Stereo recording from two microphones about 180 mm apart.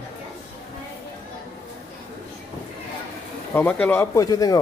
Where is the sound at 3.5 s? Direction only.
10° left (ahead or behind).